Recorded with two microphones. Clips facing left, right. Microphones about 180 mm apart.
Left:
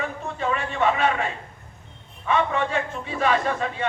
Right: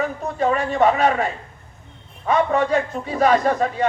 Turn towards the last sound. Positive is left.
turn(degrees=-40)  # may be behind; listen again after turning